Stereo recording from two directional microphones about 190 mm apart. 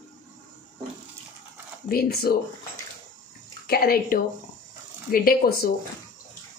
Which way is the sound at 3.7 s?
50° left (ahead or behind).